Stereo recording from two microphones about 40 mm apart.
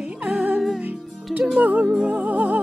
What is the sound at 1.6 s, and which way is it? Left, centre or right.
Music, right.